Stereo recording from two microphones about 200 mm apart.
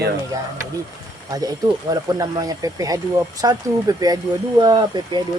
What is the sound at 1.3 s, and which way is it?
Speech, 20° right (ahead or behind).